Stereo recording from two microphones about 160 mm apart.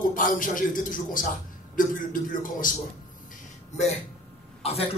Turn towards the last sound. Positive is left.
turn(degrees=40)  # may be behind; listen again after turning